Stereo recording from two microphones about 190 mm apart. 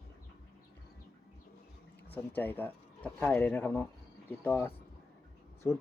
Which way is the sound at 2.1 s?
10° left (ahead or behind).